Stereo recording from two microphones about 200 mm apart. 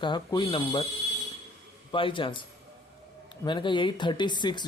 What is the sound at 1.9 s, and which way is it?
Speech, 25° left (ahead or behind).